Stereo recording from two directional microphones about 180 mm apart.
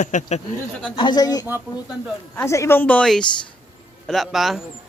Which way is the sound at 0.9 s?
25° left (ahead or behind).